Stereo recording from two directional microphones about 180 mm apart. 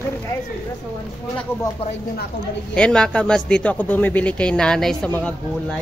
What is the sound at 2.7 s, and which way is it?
A man's voice, 5° left (ahead or behind).